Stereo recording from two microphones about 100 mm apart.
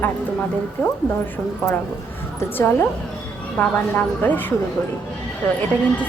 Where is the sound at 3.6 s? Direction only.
10° left (ahead or behind).